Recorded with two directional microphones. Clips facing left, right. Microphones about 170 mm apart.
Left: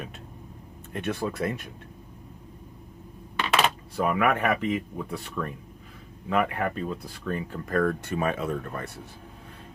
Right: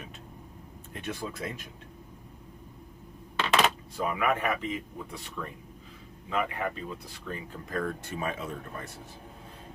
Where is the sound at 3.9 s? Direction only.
60° left (ahead or behind).